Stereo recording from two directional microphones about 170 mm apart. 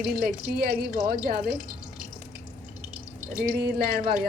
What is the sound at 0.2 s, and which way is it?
A woman's voice, 60° right (ahead or behind).